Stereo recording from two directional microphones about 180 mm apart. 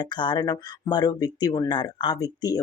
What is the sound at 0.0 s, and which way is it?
Speech, 25° left (ahead or behind).